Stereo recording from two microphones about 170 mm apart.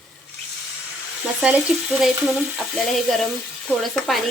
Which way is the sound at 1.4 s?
5° right (ahead or behind).